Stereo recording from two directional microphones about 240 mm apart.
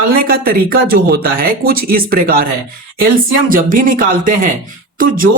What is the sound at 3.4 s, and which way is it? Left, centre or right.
Speech, right.